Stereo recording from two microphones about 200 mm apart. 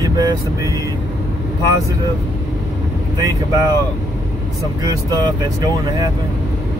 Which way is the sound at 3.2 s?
20° right (ahead or behind).